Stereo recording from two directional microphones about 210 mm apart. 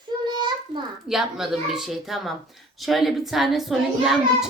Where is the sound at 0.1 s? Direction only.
20° right (ahead or behind).